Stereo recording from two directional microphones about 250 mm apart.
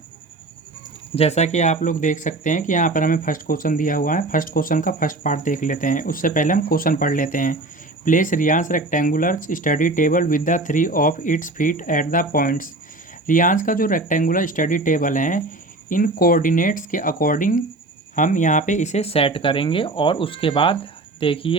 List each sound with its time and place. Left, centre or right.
1.1 s speech: left